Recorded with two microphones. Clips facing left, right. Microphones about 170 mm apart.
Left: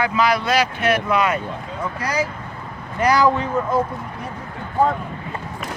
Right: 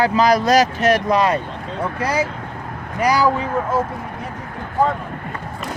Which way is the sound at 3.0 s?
10° right (ahead or behind).